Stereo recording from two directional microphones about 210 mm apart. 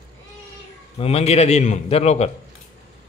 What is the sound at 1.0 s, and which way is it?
A man's voice, 30° left (ahead or behind).